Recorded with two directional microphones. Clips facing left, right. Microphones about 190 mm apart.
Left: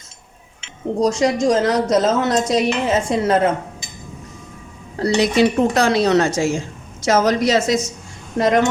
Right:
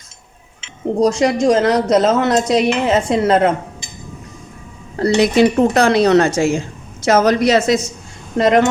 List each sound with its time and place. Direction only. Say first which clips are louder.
0.9 s speech: right 2 dB; 60° right (ahead or behind)
4.9 s speech: right 3 dB; 55° right (ahead or behind)